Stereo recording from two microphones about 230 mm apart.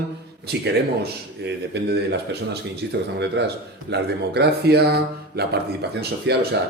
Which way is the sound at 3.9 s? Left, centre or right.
Right.